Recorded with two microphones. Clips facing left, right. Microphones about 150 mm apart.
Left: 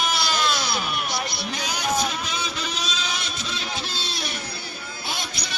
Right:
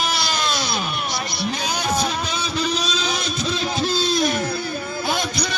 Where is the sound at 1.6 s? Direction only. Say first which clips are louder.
Right 1 dB; 35° right (ahead or behind).